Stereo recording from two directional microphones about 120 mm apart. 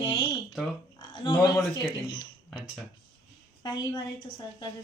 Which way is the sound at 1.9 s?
40° left (ahead or behind).